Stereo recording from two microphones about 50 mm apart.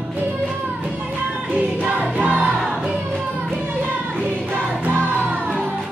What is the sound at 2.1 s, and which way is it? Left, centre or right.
Music, right.